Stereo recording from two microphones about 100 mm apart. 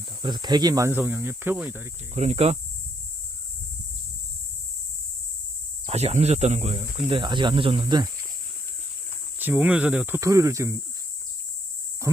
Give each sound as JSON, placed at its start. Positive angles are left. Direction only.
{"t": 0.2, "sound": "speech", "side_deg": -45}
{"t": 0.9, "sound": "speech", "side_deg": -20}
{"t": 2.1, "sound": "speech", "side_deg": -90}
{"t": 5.9, "sound": "speech", "side_deg": -90}
{"t": 7.9, "sound": "speech", "side_deg": -40}
{"t": 9.4, "sound": "speech", "side_deg": -15}
{"t": 10.2, "sound": "speech", "side_deg": -30}
{"t": 12.0, "sound": "a sound", "side_deg": -30}